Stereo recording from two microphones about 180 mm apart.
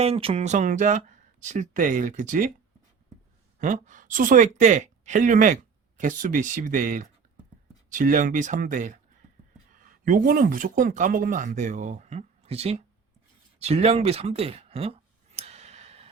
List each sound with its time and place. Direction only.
0.0 s speech: 35° right (ahead or behind)
3.6 s speech: 45° right (ahead or behind)
10.1 s speech: 50° right (ahead or behind); by 12.8 s 35° right (ahead or behind)
13.6 s a sound: 35° right (ahead or behind)